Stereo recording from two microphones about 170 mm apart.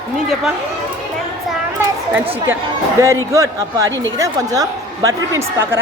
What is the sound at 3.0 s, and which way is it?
A woman's voice, 20° right (ahead or behind).